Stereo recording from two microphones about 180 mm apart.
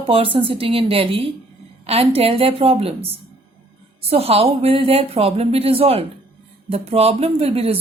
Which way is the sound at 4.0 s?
35° right (ahead or behind).